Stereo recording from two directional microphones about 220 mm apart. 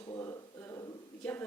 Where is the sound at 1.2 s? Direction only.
5° left (ahead or behind).